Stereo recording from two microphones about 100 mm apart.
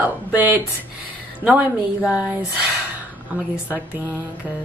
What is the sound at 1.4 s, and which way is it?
Speech, 15° right (ahead or behind).